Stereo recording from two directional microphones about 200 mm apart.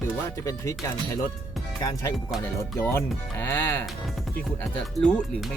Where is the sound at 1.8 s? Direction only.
20° left (ahead or behind).